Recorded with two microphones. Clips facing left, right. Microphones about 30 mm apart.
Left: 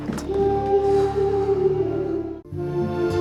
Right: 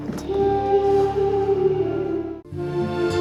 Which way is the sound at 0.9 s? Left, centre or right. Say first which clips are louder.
Right 1 dB; centre.